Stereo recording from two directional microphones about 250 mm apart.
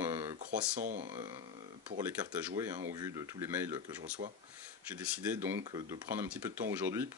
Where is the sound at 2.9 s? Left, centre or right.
Centre.